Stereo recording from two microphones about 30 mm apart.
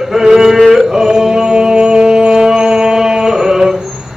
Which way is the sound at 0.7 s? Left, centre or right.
Centre.